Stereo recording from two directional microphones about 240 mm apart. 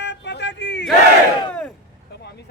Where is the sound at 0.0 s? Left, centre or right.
Left.